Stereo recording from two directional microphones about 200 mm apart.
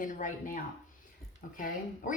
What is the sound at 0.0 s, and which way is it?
Speech, 40° left (ahead or behind).